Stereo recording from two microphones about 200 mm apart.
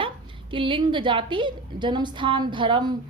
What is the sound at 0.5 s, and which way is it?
A woman's voice, 25° right (ahead or behind).